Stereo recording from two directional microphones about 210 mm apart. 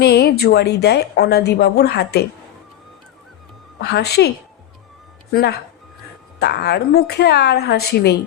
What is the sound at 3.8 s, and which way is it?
A woman's voice, 50° left (ahead or behind).